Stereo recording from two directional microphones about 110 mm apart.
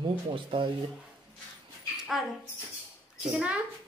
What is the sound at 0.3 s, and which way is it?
Speech, 50° right (ahead or behind).